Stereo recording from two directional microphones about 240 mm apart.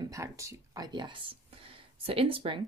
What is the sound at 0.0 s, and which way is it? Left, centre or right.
Speech, centre.